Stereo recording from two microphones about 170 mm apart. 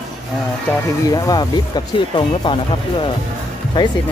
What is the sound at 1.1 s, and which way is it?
Speech, 25° left (ahead or behind).